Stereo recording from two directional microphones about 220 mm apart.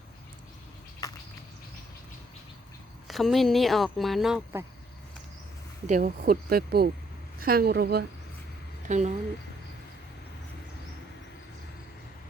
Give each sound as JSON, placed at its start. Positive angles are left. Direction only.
{"t": 1.0, "sound": "cricket", "side_deg": 15}
{"t": 3.1, "sound": "speech", "side_deg": 0}
{"t": 5.9, "sound": "speech", "side_deg": -40}
{"t": 8.9, "sound": "speech", "side_deg": -30}